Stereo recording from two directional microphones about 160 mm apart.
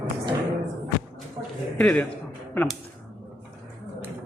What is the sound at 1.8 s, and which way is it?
Speech, 10° left (ahead or behind).